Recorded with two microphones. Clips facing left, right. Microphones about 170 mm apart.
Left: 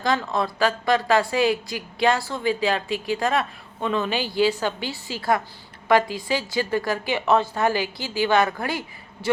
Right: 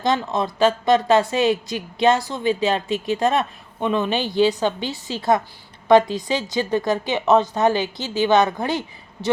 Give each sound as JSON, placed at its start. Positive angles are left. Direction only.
{"t": 0.0, "sound": "a woman's voice", "side_deg": -20}